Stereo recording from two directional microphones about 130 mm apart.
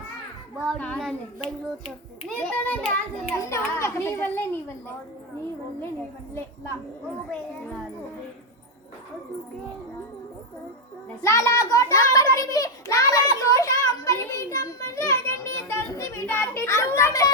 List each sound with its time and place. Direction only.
0.7 s a child's voice: 5° left (ahead or behind)
2.3 s a child's voice: 10° left (ahead or behind)
3.3 s a child's voice: 20° left (ahead or behind)
11.2 s a child's voice: 25° left (ahead or behind)